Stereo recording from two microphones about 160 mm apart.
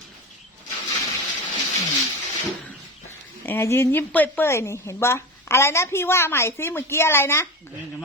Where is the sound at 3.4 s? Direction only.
15° left (ahead or behind).